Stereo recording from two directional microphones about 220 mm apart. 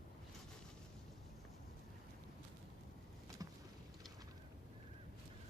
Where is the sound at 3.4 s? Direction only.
15° right (ahead or behind).